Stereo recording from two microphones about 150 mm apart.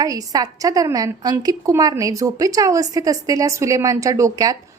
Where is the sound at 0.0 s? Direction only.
25° right (ahead or behind).